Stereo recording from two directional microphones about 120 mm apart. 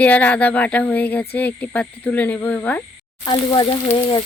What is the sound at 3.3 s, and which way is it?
Frying, 40° left (ahead or behind).